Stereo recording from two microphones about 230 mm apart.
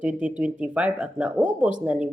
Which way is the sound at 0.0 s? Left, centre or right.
Centre.